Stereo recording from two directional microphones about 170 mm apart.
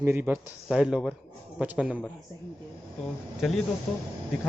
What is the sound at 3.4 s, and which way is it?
Speech, centre (ahead or behind).